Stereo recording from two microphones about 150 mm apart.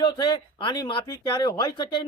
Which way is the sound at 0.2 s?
30° left (ahead or behind).